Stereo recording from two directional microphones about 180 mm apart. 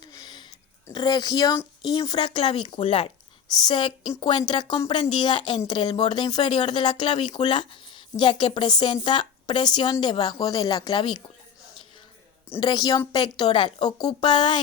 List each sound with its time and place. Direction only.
0.0 s a sound: 20° left (ahead or behind)
0.9 s speech: 25° left (ahead or behind)
12.5 s speech: 25° left (ahead or behind)